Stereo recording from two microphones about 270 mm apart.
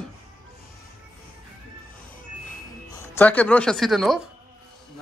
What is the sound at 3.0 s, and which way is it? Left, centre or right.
Speech, centre.